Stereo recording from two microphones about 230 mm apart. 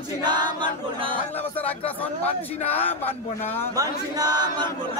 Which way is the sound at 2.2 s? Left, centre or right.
Left.